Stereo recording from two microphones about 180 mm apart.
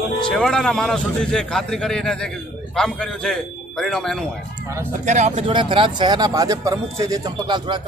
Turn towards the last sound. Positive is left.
turn(degrees=-25)  # may be behind; listen again after turning